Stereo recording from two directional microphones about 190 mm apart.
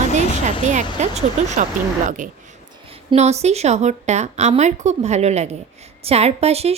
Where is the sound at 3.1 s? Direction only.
35° right (ahead or behind).